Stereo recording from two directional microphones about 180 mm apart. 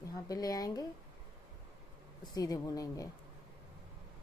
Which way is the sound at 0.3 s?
20° left (ahead or behind).